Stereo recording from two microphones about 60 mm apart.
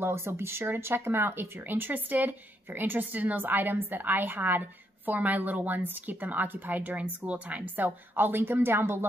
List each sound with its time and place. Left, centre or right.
0.0 s speech: right